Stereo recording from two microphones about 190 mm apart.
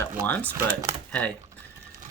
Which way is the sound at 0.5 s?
15° right (ahead or behind).